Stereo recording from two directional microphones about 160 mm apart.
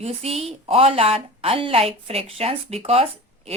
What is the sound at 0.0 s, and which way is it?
A woman's voice, 40° right (ahead or behind).